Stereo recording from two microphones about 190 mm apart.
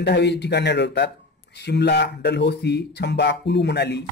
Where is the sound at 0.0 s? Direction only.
65° left (ahead or behind).